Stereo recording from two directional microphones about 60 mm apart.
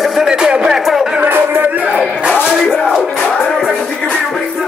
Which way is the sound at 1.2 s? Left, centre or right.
Right.